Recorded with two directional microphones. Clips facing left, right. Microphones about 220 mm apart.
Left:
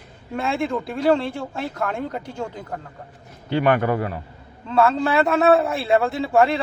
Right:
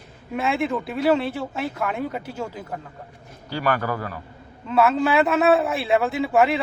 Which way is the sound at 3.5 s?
20° left (ahead or behind).